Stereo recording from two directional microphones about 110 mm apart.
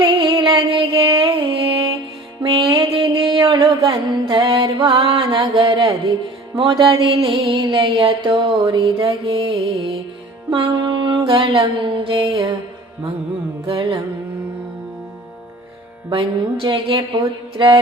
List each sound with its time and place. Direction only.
0.0 s music: 50° right (ahead or behind)
2.4 s mantra: 50° right (ahead or behind)
3.8 s music: 45° right (ahead or behind)
10.5 s music: 50° right (ahead or behind)
13.7 s music: 50° right (ahead or behind)
16.0 s music: 50° right (ahead or behind)